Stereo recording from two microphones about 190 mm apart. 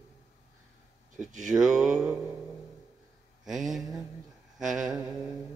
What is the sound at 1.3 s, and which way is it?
Speech, 40° right (ahead or behind).